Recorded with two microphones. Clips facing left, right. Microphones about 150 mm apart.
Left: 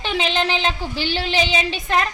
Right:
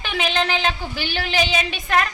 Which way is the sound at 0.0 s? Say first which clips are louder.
Left 2 dB; 30° left (ahead or behind).